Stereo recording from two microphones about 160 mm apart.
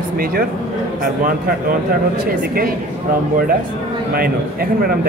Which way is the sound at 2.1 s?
65° right (ahead or behind).